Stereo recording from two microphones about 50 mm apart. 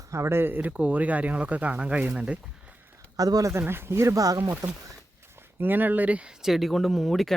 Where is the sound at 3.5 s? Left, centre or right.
Right.